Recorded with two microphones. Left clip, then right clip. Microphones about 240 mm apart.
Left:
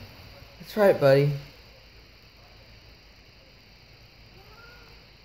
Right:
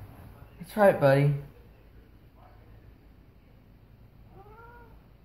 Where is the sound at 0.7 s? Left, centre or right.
Left.